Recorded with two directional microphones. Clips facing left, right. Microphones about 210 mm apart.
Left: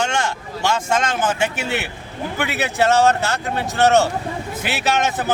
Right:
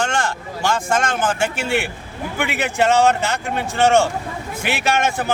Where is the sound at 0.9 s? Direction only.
5° right (ahead or behind).